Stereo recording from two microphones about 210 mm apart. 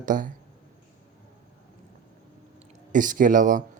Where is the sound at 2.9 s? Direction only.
40° right (ahead or behind).